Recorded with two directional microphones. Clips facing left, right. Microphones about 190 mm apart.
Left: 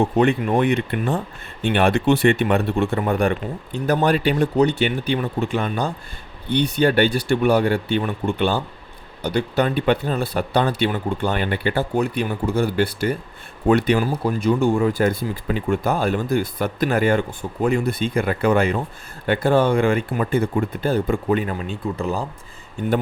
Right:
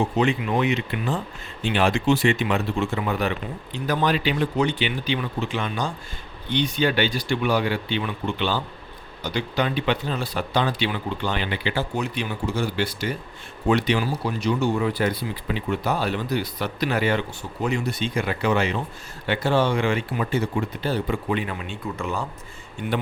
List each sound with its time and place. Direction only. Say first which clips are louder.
0.0 s speech: left 4 dB; 55° left (ahead or behind)
9.6 s speech: left 4 dB; 50° left (ahead or behind)